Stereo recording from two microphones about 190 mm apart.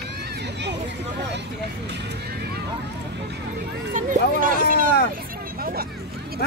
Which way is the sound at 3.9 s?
45° right (ahead or behind).